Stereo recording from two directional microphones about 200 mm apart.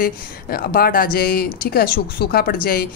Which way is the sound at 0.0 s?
45° left (ahead or behind).